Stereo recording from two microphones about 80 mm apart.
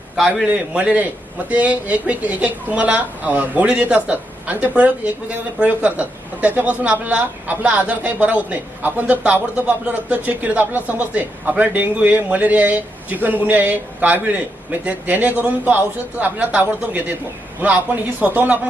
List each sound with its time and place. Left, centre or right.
0.4 s a man's voice: centre